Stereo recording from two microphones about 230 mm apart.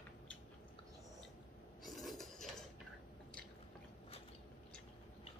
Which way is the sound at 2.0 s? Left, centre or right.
Centre.